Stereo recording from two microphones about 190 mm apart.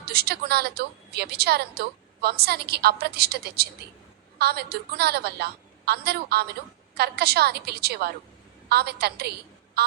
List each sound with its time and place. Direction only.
0.0 s a woman's voice: 55° right (ahead or behind)